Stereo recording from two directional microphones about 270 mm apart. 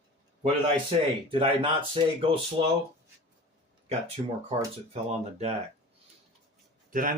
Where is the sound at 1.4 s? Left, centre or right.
Centre.